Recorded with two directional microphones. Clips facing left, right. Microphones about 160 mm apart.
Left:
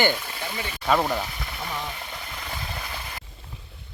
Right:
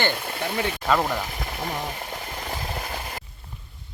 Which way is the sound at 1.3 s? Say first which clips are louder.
Right 3 dB; 45° right (ahead or behind).